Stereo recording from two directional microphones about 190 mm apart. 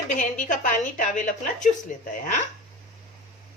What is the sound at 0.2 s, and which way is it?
A woman's voice, 40° left (ahead or behind).